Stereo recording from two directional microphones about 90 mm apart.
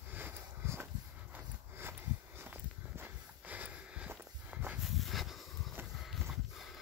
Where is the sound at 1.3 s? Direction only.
25° right (ahead or behind).